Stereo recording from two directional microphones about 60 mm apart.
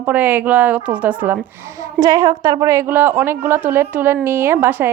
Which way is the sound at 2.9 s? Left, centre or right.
Right.